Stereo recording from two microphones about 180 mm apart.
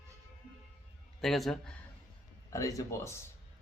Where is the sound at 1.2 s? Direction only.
Centre (ahead or behind).